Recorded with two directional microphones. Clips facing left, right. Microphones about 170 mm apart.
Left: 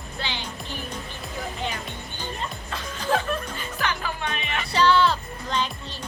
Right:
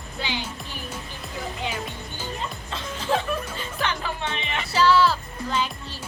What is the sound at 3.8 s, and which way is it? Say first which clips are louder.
Music: even; 25° right (ahead or behind).